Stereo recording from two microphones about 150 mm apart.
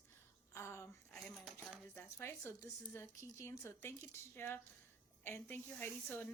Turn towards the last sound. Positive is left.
turn(degrees=15)  # may be behind; listen again after turning